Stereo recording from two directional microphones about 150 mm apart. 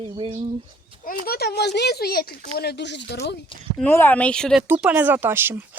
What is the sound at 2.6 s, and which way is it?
Speech, 90° left.